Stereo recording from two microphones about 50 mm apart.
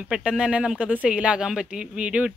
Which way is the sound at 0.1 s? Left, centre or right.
Centre.